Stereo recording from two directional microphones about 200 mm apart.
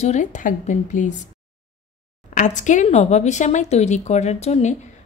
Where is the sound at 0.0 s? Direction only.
35° left (ahead or behind).